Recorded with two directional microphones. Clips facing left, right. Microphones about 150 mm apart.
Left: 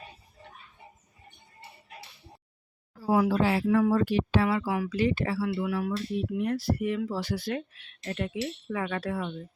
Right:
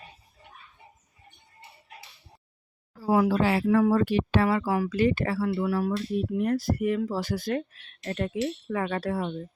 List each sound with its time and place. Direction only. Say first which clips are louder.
3.1 s speech: right 1 dB; 60° right (ahead or behind); by 9.4 s 35° right (ahead or behind)